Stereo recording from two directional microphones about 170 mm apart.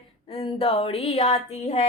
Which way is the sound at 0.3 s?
35° left (ahead or behind).